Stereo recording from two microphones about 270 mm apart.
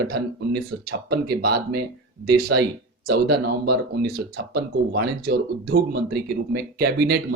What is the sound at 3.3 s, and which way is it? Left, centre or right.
Speech, right.